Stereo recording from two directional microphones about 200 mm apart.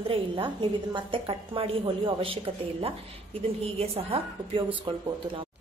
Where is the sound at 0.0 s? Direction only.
25° right (ahead or behind).